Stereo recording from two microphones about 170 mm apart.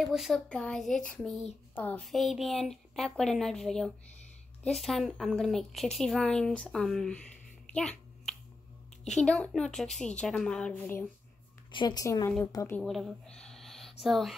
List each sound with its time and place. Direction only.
0.0 s speech: centre (ahead or behind)
7.7 s a sound: 5° left (ahead or behind)
9.0 s speech: 5° left (ahead or behind)
11.7 s a woman's voice: 25° left (ahead or behind)
12.8 s speech: centre (ahead or behind)